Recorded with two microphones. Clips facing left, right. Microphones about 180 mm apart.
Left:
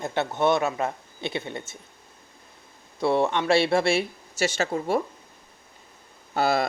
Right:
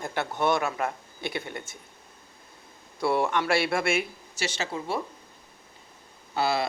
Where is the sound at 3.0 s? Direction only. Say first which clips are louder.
Left 3 dB; 25° left (ahead or behind).